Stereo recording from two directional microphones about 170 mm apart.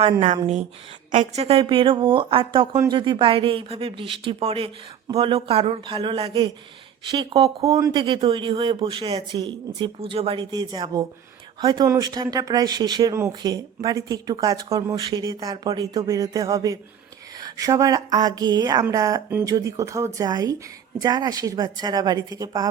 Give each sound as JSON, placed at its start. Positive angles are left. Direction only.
{"t": 0.0, "sound": "speech", "side_deg": -40}